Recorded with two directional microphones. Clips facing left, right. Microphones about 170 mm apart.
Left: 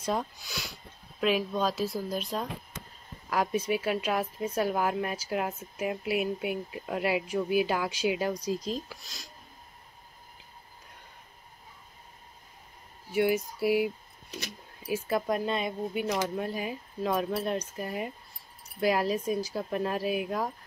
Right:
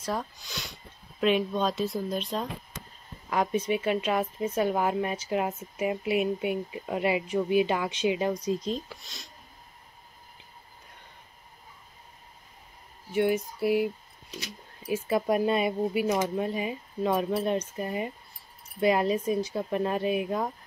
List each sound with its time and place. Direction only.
0.2 s a woman's voice: 5° left (ahead or behind)
13.1 s a woman's voice: 5° left (ahead or behind)